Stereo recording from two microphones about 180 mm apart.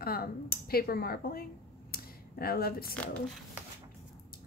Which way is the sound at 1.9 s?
60° left (ahead or behind).